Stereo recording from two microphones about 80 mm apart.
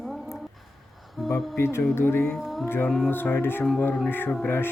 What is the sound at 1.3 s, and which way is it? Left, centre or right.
Speech, left.